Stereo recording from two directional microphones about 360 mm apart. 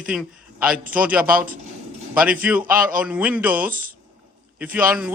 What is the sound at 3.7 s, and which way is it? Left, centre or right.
Speech, right.